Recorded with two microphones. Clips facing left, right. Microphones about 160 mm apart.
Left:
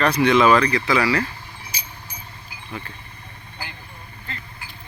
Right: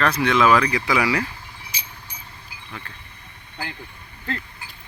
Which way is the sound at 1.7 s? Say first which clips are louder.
Left 1 dB; 40° left (ahead or behind).